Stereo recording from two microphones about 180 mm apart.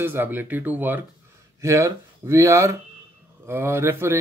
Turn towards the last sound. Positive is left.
turn(degrees=-15)  # may be behind; listen again after turning